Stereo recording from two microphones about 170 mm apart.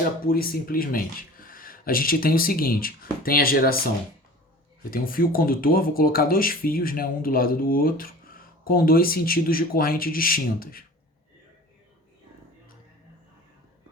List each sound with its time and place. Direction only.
0.2 s speech: 60° left (ahead or behind)